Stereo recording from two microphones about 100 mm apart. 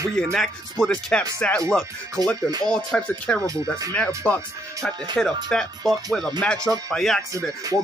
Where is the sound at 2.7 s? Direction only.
10° left (ahead or behind).